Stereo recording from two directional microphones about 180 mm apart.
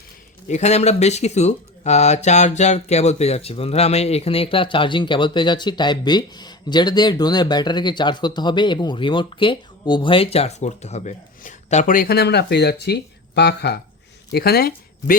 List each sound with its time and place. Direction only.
0.4 s speech: 40° left (ahead or behind); by 15.1 s 60° left (ahead or behind)